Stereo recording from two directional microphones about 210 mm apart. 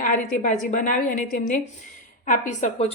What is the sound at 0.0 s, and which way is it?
A woman's voice, 40° left (ahead or behind).